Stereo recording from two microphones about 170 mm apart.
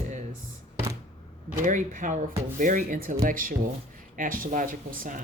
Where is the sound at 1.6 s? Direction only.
50° right (ahead or behind).